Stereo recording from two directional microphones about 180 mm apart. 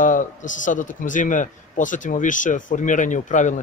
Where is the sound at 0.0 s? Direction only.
45° left (ahead or behind).